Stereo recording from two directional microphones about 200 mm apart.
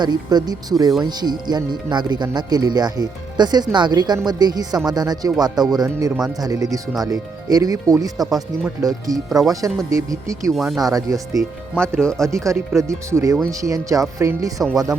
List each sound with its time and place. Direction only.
0.0 s speech: 20° right (ahead or behind)
10.5 s speech: centre (ahead or behind)
10.8 s speech: 20° right (ahead or behind)
11.3 s speech: 5° left (ahead or behind)
12.3 s speech: 15° right (ahead or behind)
14.6 s speech: centre (ahead or behind)